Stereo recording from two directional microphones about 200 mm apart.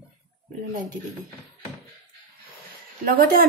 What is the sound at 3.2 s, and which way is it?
Speech, 45° right (ahead or behind).